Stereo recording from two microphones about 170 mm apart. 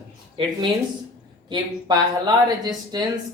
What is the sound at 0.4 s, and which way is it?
Speech, 30° right (ahead or behind).